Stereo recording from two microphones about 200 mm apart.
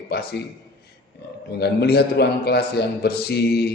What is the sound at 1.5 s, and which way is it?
A man's voice, 55° left (ahead or behind).